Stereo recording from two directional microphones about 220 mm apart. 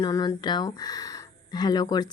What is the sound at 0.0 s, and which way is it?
Speech, 20° left (ahead or behind).